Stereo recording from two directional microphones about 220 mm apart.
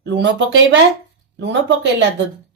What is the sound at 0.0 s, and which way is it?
Speech, 55° right (ahead or behind).